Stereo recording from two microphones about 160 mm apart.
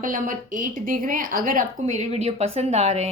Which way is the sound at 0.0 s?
55° right (ahead or behind).